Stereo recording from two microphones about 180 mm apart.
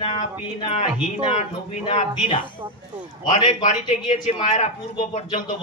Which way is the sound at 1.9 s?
30° left (ahead or behind).